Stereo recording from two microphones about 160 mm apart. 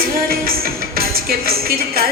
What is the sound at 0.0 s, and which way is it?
Music, 65° right (ahead or behind).